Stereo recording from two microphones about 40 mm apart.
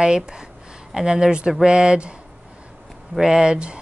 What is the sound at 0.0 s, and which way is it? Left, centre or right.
Speech, centre.